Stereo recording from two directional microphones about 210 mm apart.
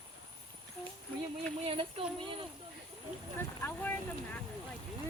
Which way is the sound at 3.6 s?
10° left (ahead or behind).